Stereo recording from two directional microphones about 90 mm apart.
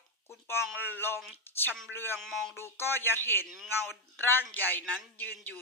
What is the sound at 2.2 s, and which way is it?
Speech, centre (ahead or behind).